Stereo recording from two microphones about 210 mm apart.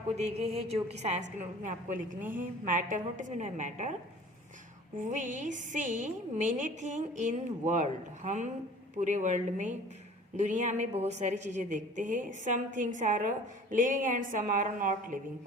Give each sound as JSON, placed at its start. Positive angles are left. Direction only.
{"t": 0.2, "sound": "a woman's voice", "side_deg": -30}
{"t": 4.9, "sound": "a woman's voice", "side_deg": -35}